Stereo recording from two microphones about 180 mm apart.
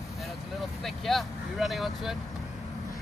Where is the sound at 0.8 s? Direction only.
Centre (ahead or behind).